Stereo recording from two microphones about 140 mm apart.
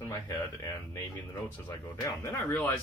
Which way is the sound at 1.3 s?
25° left (ahead or behind).